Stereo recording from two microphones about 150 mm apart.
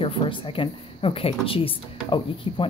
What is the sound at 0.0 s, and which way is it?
Speech, 35° left (ahead or behind).